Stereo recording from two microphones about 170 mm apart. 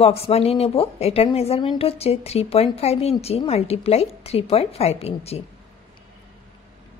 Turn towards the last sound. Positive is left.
turn(degrees=35)  # may be behind; listen again after turning